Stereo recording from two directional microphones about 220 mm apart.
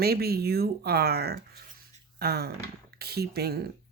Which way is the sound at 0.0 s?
45° right (ahead or behind).